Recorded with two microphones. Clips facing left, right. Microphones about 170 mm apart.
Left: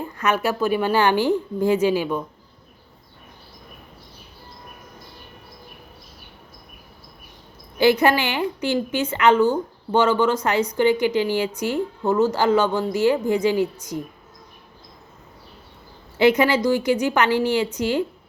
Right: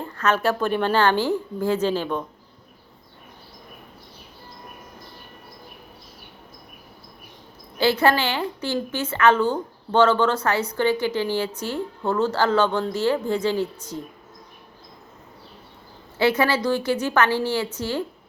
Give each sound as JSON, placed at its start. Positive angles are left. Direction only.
{"t": 0.0, "sound": "a woman's voice", "side_deg": 10}
{"t": 7.8, "sound": "a woman's voice", "side_deg": 15}
{"t": 16.1, "sound": "a woman's voice", "side_deg": 15}